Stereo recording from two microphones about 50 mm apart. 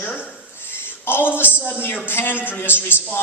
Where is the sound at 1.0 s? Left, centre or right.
Left.